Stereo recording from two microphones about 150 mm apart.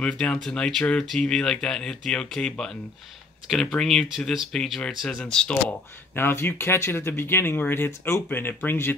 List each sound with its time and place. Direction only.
0.0 s speech: 5° left (ahead or behind)